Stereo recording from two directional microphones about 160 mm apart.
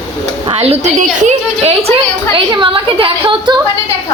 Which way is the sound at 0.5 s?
40° right (ahead or behind).